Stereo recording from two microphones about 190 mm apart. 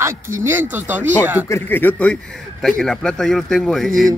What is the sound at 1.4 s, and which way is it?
A man's voice, 15° left (ahead or behind).